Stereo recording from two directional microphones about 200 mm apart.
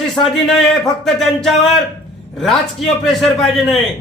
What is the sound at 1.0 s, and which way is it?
Speech, centre (ahead or behind).